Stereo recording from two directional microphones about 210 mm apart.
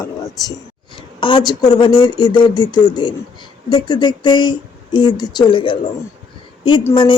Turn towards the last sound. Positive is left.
turn(degrees=20)  # may be behind; listen again after turning